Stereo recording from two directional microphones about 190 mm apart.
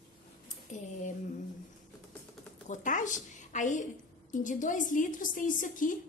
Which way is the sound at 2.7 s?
40° left (ahead or behind).